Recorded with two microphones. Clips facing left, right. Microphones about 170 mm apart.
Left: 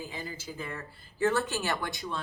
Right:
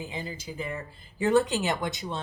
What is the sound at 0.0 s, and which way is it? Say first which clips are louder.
Speech: right 3 dB; 20° right (ahead or behind).